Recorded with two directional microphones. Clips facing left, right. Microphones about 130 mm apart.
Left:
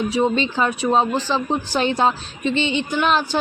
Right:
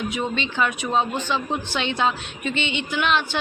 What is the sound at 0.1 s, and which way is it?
Speech, 35° left (ahead or behind).